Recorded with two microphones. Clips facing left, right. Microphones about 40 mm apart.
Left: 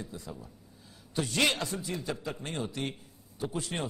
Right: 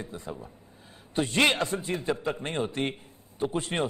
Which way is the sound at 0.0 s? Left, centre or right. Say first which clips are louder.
Right 4 dB; right.